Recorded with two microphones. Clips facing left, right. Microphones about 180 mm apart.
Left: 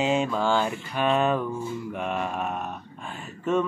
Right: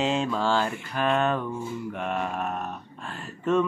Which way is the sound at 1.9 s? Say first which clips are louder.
Even; centre (ahead or behind).